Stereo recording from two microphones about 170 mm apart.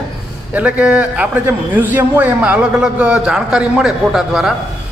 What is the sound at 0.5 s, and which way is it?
A man's voice, 5° right (ahead or behind).